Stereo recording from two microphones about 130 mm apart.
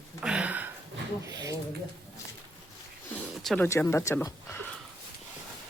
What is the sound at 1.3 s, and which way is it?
Speech, 30° right (ahead or behind).